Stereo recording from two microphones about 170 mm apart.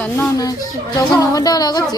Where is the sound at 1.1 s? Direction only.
20° left (ahead or behind).